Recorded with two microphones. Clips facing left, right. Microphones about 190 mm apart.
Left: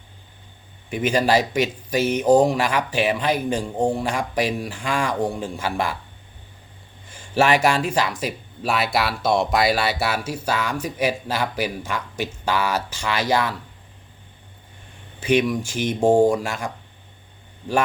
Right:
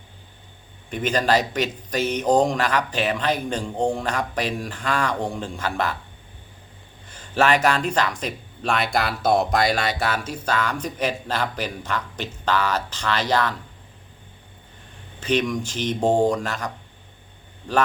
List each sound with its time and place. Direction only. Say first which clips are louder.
0.9 s speech: left 2 dB; 10° left (ahead or behind)
7.1 s speech: left 1 dB; 10° left (ahead or behind)
15.2 s speech: left 3 dB; 10° left (ahead or behind)